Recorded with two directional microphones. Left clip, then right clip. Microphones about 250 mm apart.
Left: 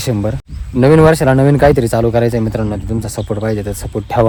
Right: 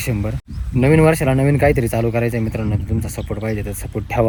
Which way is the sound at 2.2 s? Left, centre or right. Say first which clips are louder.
Left 6 dB; left.